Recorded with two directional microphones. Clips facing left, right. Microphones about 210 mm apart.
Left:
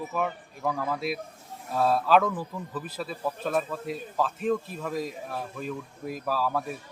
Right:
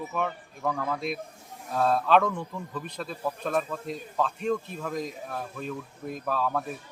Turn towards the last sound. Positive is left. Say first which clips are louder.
# even
turn(degrees=0)  # may be behind; listen again after turning